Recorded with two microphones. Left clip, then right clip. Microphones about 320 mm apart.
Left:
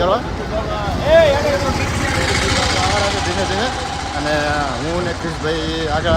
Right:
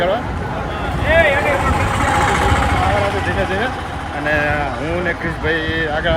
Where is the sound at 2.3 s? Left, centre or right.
Centre.